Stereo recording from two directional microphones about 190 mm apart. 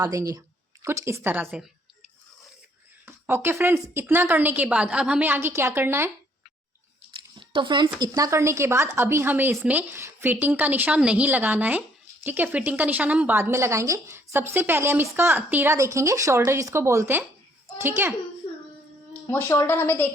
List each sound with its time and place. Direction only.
0.0 s a woman's voice: 15° right (ahead or behind)
3.1 s a woman's voice: 10° right (ahead or behind)
7.1 s a sound: 25° right (ahead or behind)
7.9 s a woman's voice: 20° right (ahead or behind)
19.3 s a woman's voice: 10° left (ahead or behind)